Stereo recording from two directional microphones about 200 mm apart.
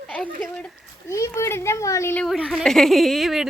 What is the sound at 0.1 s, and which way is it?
Speech, 5° left (ahead or behind).